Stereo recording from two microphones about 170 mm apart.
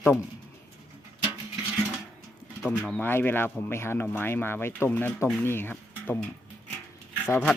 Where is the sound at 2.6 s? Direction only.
10° left (ahead or behind).